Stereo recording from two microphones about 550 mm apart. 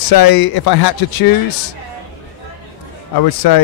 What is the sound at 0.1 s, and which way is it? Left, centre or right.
Speech, left.